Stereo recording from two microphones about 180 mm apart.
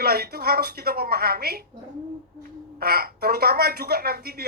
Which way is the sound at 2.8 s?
55° right (ahead or behind).